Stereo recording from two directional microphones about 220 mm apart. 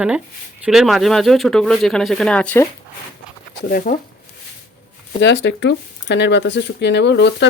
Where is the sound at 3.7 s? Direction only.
40° left (ahead or behind).